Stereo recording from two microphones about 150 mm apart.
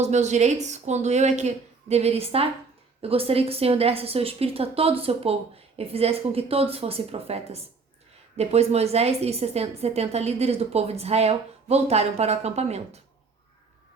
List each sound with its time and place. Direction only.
0.0 s a woman's voice: 50° right (ahead or behind)